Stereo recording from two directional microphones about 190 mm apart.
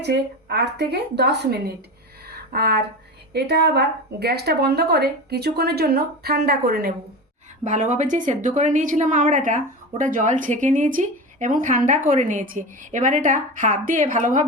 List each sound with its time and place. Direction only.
0.0 s speech: 60° right (ahead or behind)
7.6 s a woman's voice: 40° right (ahead or behind)